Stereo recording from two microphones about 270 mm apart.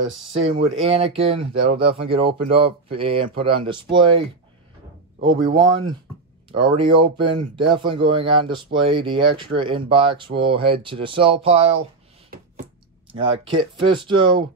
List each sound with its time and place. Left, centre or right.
0.0 s speech: right
0.4 s speech: right
5.6 s speech: centre
13.1 s speech: centre